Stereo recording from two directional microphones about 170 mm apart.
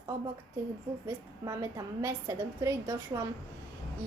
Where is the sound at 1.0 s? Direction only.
20° right (ahead or behind).